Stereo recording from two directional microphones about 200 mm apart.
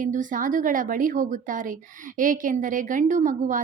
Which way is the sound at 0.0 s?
40° right (ahead or behind).